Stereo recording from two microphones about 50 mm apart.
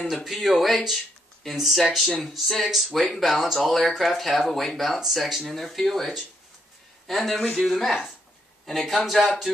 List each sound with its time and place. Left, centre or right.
0.1 s speech: centre